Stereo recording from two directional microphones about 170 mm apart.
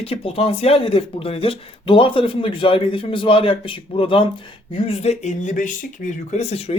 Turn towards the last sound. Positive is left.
turn(degrees=35)  # may be behind; listen again after turning